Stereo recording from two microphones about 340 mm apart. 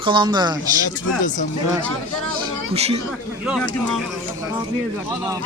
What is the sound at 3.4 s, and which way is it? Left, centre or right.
Speech, centre.